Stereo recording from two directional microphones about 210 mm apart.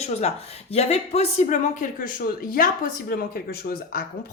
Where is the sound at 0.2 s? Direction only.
30° left (ahead or behind).